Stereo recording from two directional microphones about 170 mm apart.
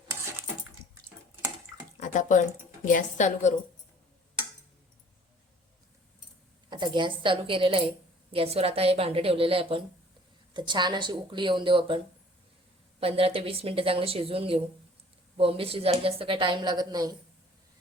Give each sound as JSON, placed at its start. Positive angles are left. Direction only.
{"t": 2.0, "sound": "drip", "side_deg": 45}
{"t": 2.8, "sound": "a woman's voice", "side_deg": 50}
{"t": 6.7, "sound": "speech", "side_deg": -25}